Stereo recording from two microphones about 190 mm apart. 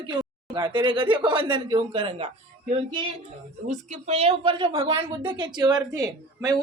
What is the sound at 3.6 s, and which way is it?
A woman's voice, 35° right (ahead or behind).